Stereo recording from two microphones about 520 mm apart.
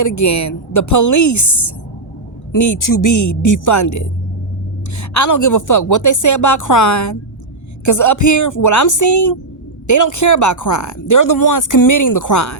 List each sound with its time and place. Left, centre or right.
0.0 s speech: left